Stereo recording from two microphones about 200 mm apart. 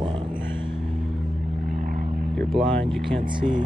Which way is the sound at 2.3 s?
5° left (ahead or behind).